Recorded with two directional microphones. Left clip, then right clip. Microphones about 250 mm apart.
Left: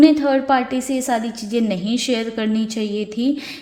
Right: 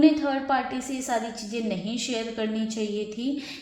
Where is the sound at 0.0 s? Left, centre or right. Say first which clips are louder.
Left 8 dB; left.